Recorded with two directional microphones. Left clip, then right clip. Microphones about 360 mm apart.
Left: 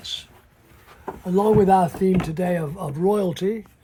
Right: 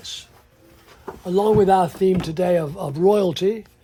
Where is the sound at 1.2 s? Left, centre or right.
Centre.